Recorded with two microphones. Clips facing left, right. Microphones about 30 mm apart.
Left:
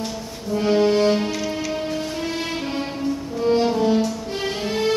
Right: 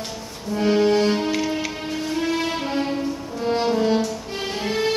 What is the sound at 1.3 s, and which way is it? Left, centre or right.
Music, centre.